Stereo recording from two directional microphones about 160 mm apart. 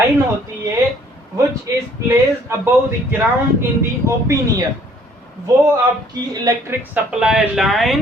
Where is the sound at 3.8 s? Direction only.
20° right (ahead or behind).